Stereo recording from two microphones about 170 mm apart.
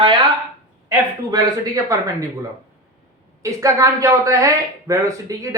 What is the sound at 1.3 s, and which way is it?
Speech, 25° right (ahead or behind).